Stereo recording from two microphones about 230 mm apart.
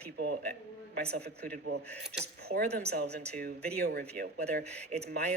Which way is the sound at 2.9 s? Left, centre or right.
Right.